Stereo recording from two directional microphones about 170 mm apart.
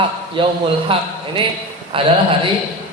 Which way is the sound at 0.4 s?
30° right (ahead or behind).